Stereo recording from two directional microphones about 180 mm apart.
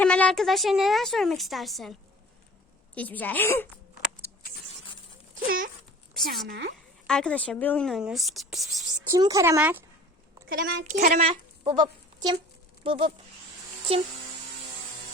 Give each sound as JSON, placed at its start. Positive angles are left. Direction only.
{"t": 0.0, "sound": "a woman's voice", "side_deg": 5}
{"t": 5.3, "sound": "a sound", "side_deg": -50}
{"t": 6.5, "sound": "a woman's voice", "side_deg": -60}
{"t": 7.1, "sound": "a woman's voice", "side_deg": 5}
{"t": 9.0, "sound": "speech", "side_deg": -20}
{"t": 10.5, "sound": "a woman's voice", "side_deg": -65}
{"t": 10.8, "sound": "speech", "side_deg": -45}